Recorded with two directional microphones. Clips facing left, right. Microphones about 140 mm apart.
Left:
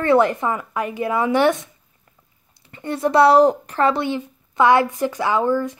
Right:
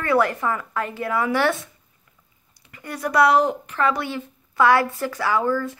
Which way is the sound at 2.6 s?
25° left (ahead or behind).